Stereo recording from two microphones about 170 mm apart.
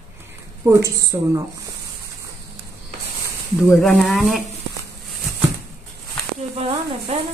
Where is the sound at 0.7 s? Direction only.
20° right (ahead or behind).